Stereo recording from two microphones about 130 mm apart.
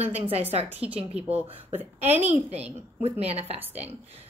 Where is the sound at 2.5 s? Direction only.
50° right (ahead or behind).